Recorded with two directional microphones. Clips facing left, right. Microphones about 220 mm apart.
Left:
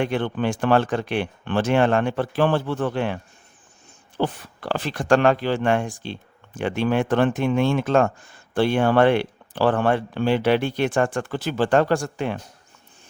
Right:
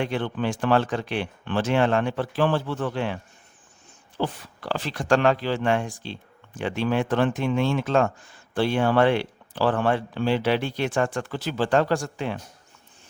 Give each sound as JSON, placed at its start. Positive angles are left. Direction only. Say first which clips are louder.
{"t": 0.0, "sound": "speech", "louder": "left 3 dB", "side_deg": 55}
{"t": 4.2, "sound": "speech", "louder": "left 3 dB", "side_deg": 55}